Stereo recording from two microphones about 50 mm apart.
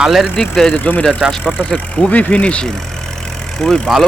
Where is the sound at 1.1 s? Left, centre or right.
Centre.